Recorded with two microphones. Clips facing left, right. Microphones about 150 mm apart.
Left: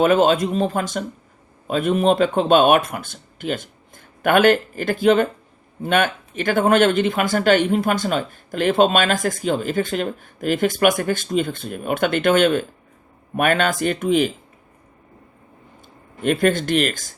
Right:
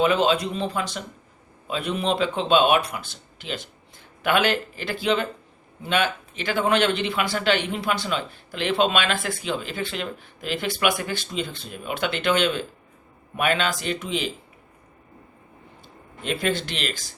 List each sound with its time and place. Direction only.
0.0 s speech: 50° left (ahead or behind)
16.2 s speech: 50° left (ahead or behind)